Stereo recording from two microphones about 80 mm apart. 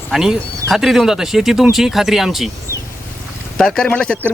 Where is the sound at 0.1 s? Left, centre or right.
Centre.